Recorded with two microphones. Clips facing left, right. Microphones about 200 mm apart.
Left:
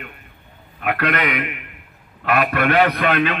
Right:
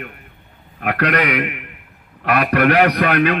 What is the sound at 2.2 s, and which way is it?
A man's voice, 40° right (ahead or behind).